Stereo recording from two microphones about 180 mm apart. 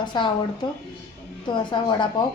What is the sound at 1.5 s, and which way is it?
Speech, 25° left (ahead or behind).